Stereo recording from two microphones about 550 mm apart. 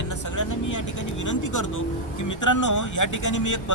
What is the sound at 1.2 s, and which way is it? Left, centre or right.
Speech, left.